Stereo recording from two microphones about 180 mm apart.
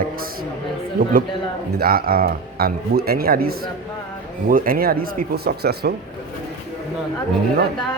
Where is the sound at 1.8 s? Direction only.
55° right (ahead or behind).